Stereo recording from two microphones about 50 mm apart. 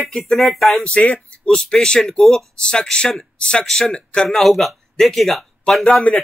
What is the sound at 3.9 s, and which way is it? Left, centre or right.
Speech, centre.